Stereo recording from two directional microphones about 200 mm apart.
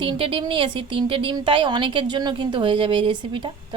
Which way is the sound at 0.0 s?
25° right (ahead or behind).